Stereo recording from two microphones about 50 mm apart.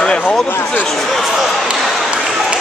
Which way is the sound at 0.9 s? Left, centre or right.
Centre.